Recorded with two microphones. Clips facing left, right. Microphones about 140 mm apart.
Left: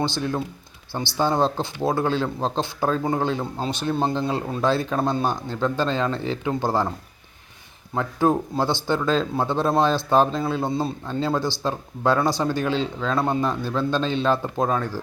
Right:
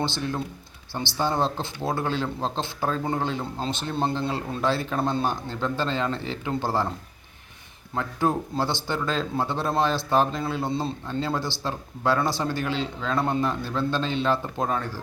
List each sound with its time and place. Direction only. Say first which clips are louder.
1.1 s speech: left 4 dB; 15° left (ahead or behind)
7.9 s speech: left 4 dB; 15° left (ahead or behind)